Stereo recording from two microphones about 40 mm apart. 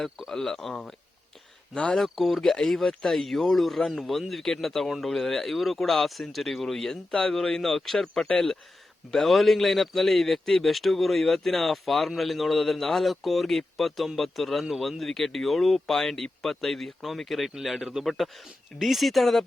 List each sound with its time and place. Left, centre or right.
0.3 s speech: centre
1.7 s speech: left
2.0 s a man's voice: centre
7.1 s speech: centre
9.2 s a man's voice: centre